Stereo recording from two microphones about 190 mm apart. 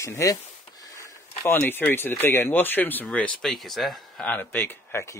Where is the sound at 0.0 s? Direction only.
15° left (ahead or behind).